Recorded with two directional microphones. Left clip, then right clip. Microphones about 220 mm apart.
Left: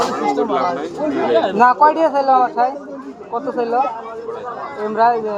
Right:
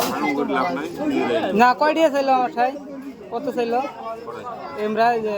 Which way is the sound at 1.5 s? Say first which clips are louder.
Left 3 dB; 30° right (ahead or behind).